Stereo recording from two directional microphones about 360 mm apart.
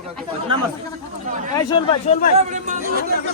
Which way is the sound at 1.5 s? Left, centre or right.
Centre.